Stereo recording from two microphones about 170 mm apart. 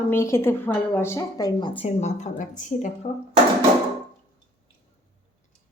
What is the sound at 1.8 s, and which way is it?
Speech, 40° left (ahead or behind).